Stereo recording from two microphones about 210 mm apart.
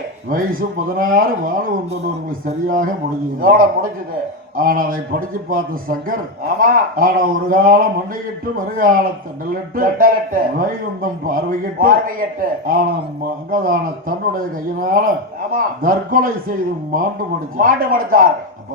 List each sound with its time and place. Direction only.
0.9 s a man's voice: 40° right (ahead or behind)
17.6 s a man's voice: 40° right (ahead or behind)